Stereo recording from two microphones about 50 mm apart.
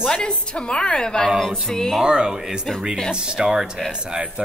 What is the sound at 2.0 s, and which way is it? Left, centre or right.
Speech, centre.